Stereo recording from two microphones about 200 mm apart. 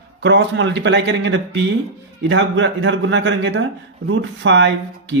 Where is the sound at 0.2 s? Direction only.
65° right (ahead or behind).